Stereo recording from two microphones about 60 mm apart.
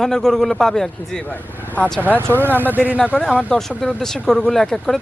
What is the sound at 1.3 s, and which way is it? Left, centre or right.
Speech, left.